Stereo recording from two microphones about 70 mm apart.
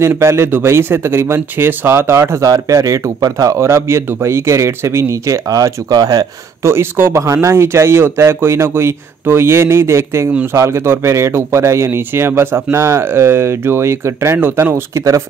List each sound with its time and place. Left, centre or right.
0.0 s speech: right
2.4 s speech: right
3.5 s speech: right
6.6 s speech: right